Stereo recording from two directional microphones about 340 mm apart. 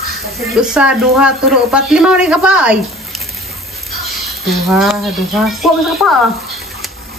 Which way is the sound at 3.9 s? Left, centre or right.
Centre.